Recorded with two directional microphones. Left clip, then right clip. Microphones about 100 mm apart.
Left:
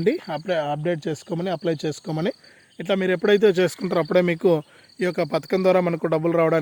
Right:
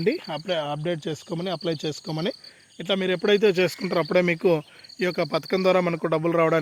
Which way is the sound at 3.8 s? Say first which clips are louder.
Left 2 dB; 40° left (ahead or behind).